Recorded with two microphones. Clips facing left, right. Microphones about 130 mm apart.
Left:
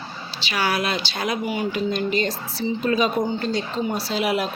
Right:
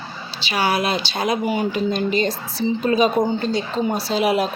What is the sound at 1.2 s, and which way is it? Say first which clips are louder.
Speech: right 5 dB; 30° right (ahead or behind).